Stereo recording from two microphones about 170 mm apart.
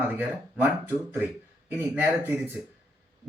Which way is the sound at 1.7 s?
10° right (ahead or behind).